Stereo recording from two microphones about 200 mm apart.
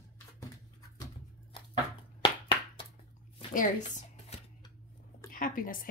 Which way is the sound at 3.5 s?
40° left (ahead or behind).